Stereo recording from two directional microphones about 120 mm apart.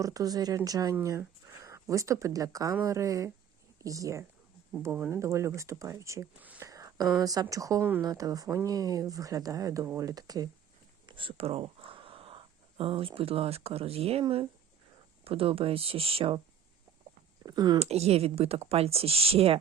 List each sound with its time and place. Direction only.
0.0 s speech: 30° right (ahead or behind)
6.6 s whispering: 30° right (ahead or behind)
7.2 s speech: 30° right (ahead or behind)
11.0 s speech: 45° right (ahead or behind)
17.4 s speech: 35° right (ahead or behind)
17.7 s speech: 60° right (ahead or behind)